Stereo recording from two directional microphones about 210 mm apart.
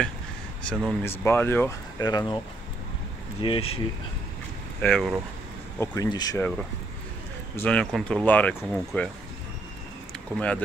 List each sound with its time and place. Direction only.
0.7 s speech: 10° left (ahead or behind)
3.4 s speech: 25° left (ahead or behind)
4.8 s speech: 5° left (ahead or behind)
5.8 s speech: 15° left (ahead or behind)
7.5 s speech: 5° left (ahead or behind)